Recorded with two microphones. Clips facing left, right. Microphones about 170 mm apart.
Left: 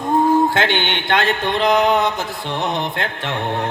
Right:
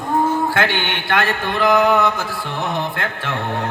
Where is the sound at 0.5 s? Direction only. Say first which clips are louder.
Left 1 dB; 20° left (ahead or behind).